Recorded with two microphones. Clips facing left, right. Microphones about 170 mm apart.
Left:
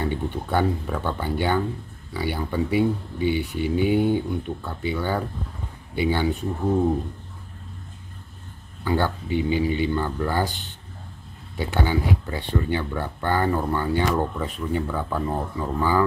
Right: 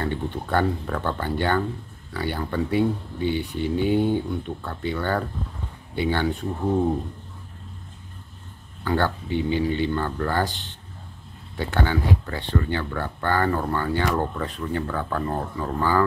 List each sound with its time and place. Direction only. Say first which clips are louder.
0.0 s speech: left 1 dB; 10° left (ahead or behind)
8.8 s speech: even; 10° left (ahead or behind)